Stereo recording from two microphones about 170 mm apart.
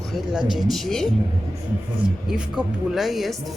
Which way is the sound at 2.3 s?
5° right (ahead or behind).